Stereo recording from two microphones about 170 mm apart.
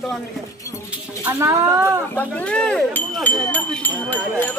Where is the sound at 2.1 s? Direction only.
5° left (ahead or behind).